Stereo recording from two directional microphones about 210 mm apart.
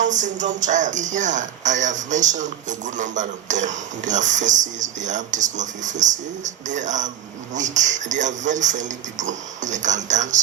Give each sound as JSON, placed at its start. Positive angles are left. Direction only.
{"t": 0.0, "sound": "speech", "side_deg": -35}